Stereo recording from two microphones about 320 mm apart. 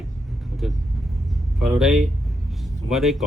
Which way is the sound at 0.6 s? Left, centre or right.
Centre.